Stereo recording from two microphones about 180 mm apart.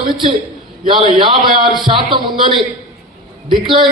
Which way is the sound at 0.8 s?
30° right (ahead or behind).